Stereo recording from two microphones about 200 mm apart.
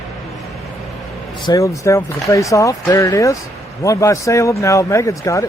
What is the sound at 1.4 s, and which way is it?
Speech, 15° left (ahead or behind).